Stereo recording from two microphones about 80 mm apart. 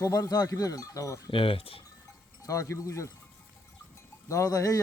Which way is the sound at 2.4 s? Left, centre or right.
Left.